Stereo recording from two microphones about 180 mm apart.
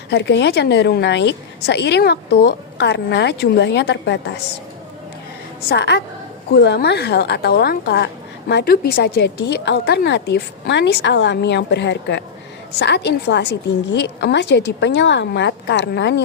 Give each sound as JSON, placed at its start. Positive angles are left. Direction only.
{"t": 0.1, "sound": "a woman's voice", "side_deg": 75}
{"t": 5.6, "sound": "a woman's voice", "side_deg": 70}